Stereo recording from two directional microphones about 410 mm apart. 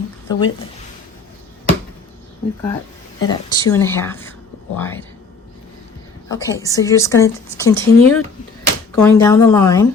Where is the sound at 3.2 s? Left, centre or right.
Centre.